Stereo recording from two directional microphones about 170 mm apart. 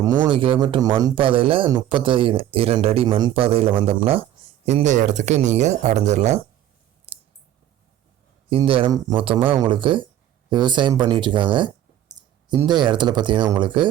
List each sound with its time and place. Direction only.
0.3 s speech: 30° right (ahead or behind)
7.1 s clicking: 35° right (ahead or behind)
8.4 s speech: 30° right (ahead or behind)
12.2 s clicking: 25° right (ahead or behind)
12.6 s speech: 25° right (ahead or behind)